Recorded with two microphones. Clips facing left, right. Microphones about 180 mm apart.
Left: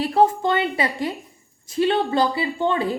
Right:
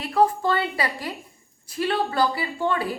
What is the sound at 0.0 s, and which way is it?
A woman's voice, 30° left (ahead or behind).